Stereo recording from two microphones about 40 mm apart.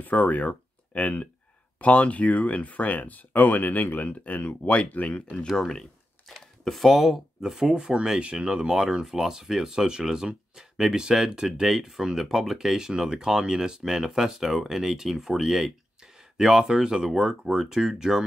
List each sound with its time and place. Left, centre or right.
0.0 s speech: left
5.6 s a sound: centre
6.6 s speech: centre
7.7 s speech: centre
11.4 s speech: centre